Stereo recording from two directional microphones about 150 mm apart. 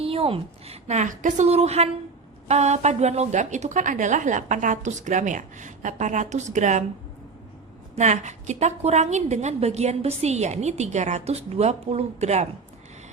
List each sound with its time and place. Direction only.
0.0 s a woman's voice: 40° right (ahead or behind)
7.9 s a woman's voice: 50° right (ahead or behind)